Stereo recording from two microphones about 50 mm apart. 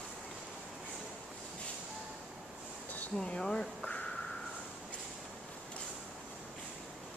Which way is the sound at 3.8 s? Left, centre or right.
Left.